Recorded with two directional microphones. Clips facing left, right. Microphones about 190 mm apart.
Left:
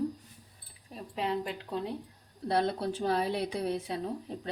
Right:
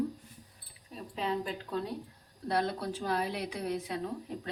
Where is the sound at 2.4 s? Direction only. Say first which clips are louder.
Left 3 dB; 30° left (ahead or behind).